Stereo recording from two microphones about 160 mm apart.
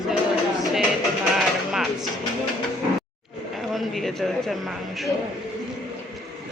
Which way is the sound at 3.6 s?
Centre (ahead or behind).